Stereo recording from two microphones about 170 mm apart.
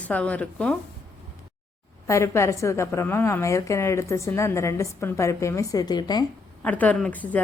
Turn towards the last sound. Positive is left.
turn(degrees=10)  # may be behind; listen again after turning